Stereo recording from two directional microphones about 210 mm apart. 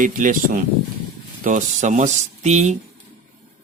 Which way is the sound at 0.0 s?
40° right (ahead or behind).